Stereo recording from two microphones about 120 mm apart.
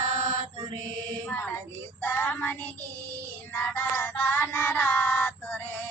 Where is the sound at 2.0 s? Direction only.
20° left (ahead or behind).